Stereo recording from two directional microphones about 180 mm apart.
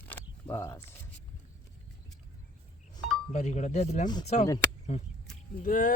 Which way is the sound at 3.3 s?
40° left (ahead or behind).